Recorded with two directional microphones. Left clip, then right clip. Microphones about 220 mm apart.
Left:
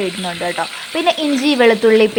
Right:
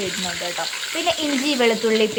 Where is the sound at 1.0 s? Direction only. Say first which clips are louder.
Left 6 dB; 25° left (ahead or behind).